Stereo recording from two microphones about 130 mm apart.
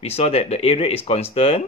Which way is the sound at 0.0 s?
50° left (ahead or behind).